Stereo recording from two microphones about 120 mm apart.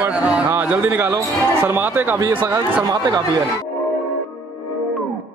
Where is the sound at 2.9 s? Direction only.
35° right (ahead or behind).